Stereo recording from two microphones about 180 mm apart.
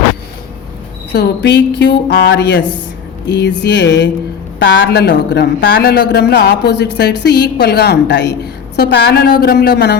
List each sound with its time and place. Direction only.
1.1 s speech: 65° left (ahead or behind)